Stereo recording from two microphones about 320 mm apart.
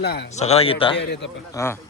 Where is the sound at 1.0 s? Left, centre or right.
Left.